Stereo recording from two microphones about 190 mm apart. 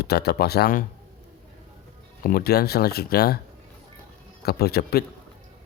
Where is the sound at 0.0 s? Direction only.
55° left (ahead or behind).